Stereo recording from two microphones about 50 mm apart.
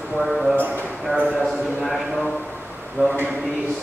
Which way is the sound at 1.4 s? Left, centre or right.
Centre.